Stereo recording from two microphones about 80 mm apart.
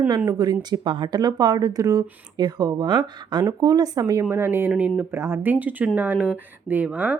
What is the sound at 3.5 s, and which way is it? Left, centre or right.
Speech, right.